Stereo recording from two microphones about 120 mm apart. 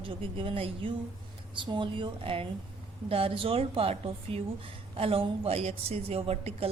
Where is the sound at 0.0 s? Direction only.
45° right (ahead or behind).